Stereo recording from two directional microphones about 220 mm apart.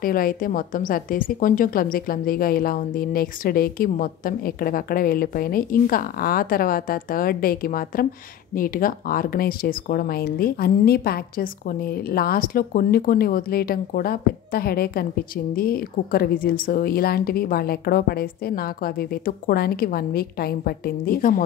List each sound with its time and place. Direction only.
0.0 s a woman's voice: 40° left (ahead or behind)